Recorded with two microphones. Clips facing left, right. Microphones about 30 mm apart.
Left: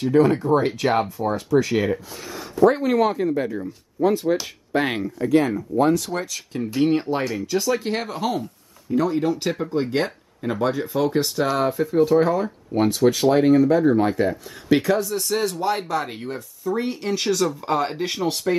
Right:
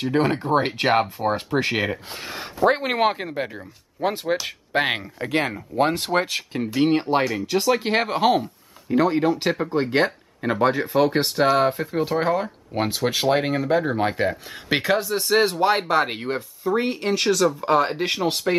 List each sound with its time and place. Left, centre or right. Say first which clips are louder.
0.0 s speech: left 4 dB; right
3.3 s speech: left 6 dB; right
5.2 s speech: left 6 dB; right
6.8 s speech: right 1 dB; right